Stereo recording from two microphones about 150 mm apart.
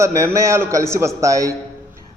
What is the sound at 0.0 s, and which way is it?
Speech, 20° right (ahead or behind).